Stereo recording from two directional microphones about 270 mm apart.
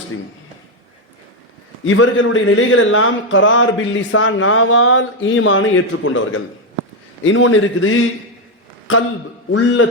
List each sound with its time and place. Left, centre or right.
1.8 s a man's voice: left
9.5 s a man's voice: left